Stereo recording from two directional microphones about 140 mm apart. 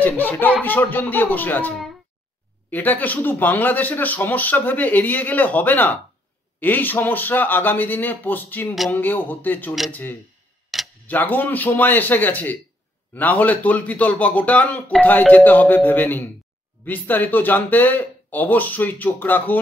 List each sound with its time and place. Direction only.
0.0 s speech: 15° left (ahead or behind)
2.7 s speech: 15° left (ahead or behind)
10.7 s tick-tock: centre (ahead or behind)
11.1 s speech: 15° left (ahead or behind)